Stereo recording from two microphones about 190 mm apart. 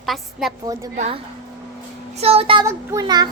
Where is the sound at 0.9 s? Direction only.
40° right (ahead or behind).